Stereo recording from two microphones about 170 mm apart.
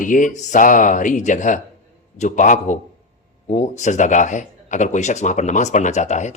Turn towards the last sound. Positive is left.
turn(degrees=45)  # may be behind; listen again after turning